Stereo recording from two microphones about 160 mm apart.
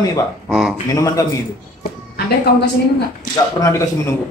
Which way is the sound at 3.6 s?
20° left (ahead or behind).